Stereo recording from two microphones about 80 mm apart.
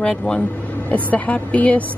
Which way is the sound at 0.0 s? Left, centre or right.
Centre.